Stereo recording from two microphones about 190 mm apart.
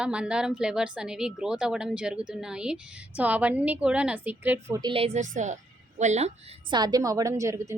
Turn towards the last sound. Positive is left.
turn(degrees=-15)  # may be behind; listen again after turning